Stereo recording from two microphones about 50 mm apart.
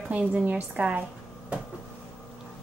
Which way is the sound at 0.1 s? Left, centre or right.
Right.